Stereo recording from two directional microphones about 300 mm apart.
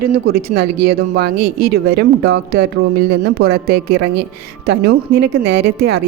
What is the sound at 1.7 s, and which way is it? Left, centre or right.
A woman's voice, right.